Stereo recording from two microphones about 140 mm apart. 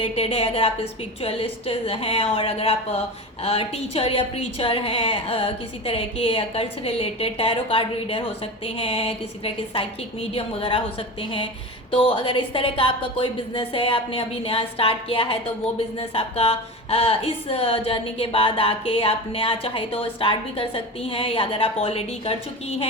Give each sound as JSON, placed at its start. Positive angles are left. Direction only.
{"t": 0.0, "sound": "a woman's voice", "side_deg": 40}